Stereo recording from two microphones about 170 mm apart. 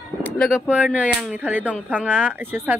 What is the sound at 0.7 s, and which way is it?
Speech, 5° right (ahead or behind).